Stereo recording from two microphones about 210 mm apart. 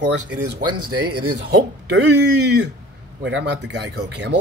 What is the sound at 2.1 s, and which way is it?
Speech, 55° right (ahead or behind).